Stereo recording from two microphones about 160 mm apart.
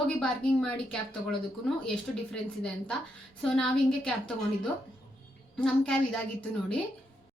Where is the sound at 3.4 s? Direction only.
5° left (ahead or behind).